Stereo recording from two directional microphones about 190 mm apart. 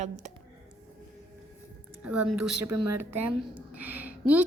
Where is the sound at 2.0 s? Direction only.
5° right (ahead or behind).